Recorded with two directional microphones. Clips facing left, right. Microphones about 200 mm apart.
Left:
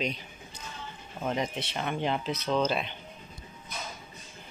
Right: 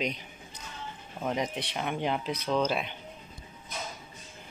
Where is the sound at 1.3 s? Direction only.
15° right (ahead or behind).